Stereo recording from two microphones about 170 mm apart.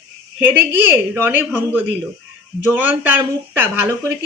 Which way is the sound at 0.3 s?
10° right (ahead or behind).